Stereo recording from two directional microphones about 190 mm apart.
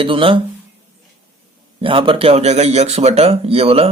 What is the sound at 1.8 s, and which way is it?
Speech, 25° right (ahead or behind).